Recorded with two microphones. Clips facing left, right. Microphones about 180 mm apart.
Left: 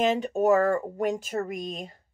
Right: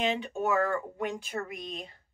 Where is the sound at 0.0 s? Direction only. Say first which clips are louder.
Left 7 dB; 45° left (ahead or behind).